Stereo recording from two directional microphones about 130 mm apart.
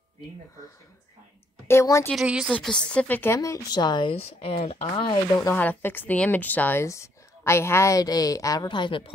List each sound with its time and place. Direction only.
1.7 s speech: 20° left (ahead or behind)
2.2 s a woman's voice: 5° right (ahead or behind)
2.5 s speech: 5° left (ahead or behind)
3.3 s speech: 25° left (ahead or behind)
4.1 s speech: 50° left (ahead or behind)
4.9 s speech: 35° left (ahead or behind)
5.5 s speech: 15° left (ahead or behind); by 9.1 s 40° left (ahead or behind)